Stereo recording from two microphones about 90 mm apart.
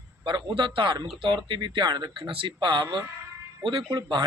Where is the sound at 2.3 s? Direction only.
75° right (ahead or behind).